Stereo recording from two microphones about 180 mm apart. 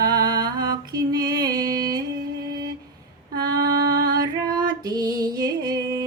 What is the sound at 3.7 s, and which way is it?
Female singing, 65° right (ahead or behind).